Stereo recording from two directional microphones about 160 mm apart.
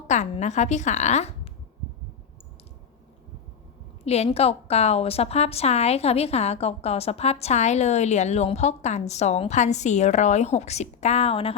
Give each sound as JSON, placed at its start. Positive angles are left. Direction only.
{"t": 0.1, "sound": "a woman's voice", "side_deg": 45}
{"t": 4.0, "sound": "a woman's voice", "side_deg": 40}